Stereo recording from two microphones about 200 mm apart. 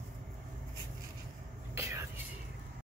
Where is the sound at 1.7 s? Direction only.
15° right (ahead or behind).